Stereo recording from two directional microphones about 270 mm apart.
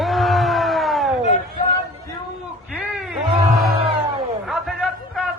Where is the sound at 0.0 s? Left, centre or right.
Centre.